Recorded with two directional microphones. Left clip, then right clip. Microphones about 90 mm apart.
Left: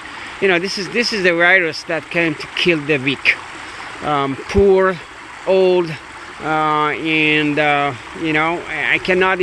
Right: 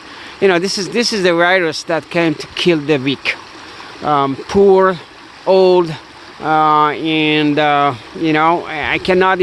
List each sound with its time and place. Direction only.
0.4 s speech: 70° right (ahead or behind); by 3.3 s 55° right (ahead or behind)
4.0 s speech: 35° right (ahead or behind)
5.5 s speech: 55° right (ahead or behind)
6.4 s speech: 35° right (ahead or behind); by 8.6 s 90° right
8.6 s speech: 55° right (ahead or behind)